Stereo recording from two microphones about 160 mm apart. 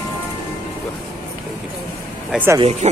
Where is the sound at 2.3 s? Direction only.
10° right (ahead or behind).